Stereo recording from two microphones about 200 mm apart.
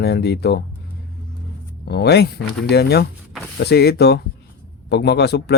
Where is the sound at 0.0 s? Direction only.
55° left (ahead or behind).